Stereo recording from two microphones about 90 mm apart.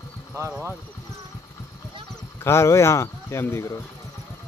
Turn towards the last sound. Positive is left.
turn(degrees=30)  # may be behind; listen again after turning